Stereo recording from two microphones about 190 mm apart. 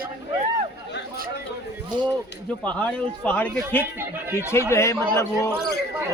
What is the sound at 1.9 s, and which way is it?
Speech, 25° right (ahead or behind).